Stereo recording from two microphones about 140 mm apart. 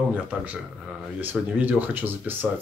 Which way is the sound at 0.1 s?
10° right (ahead or behind).